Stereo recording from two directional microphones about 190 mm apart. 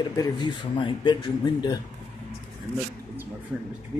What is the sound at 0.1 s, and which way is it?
Speech, 20° left (ahead or behind).